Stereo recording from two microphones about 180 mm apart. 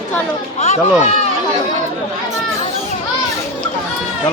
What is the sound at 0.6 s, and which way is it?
Speech, 40° left (ahead or behind).